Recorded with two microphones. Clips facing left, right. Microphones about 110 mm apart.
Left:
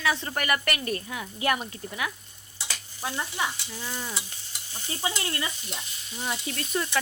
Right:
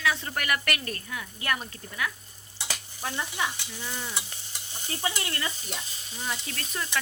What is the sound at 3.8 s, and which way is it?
Frying, 10° left (ahead or behind).